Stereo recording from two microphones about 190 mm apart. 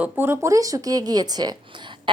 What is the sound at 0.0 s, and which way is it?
Speech, 10° right (ahead or behind).